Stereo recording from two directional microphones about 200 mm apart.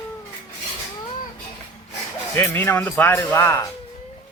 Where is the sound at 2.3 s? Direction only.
10° left (ahead or behind).